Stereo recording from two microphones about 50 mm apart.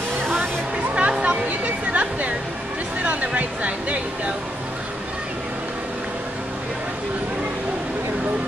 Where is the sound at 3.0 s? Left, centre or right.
Right.